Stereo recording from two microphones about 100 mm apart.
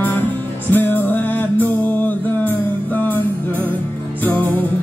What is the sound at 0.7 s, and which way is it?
Music, 20° left (ahead or behind).